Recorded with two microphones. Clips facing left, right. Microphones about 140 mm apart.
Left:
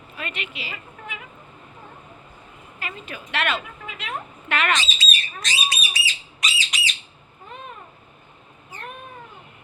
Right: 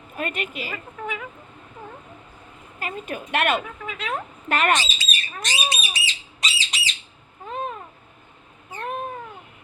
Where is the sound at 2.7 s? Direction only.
45° right (ahead or behind).